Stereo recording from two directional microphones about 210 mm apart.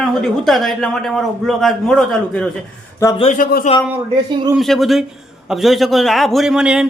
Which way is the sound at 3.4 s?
45° left (ahead or behind).